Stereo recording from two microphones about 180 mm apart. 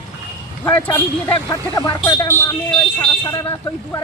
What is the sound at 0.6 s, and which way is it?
Speech, 10° left (ahead or behind).